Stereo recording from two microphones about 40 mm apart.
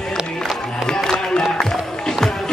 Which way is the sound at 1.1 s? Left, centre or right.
Centre.